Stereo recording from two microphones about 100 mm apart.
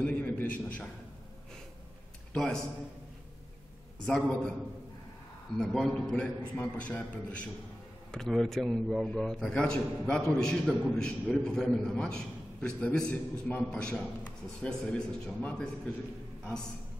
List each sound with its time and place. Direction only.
0.0 s a sound: 15° left (ahead or behind)
2.3 s speech: 5° left (ahead or behind)
4.0 s a man's voice: 10° left (ahead or behind)
5.6 s a man's voice: 5° left (ahead or behind)
8.1 s a man's voice: 5° left (ahead or behind)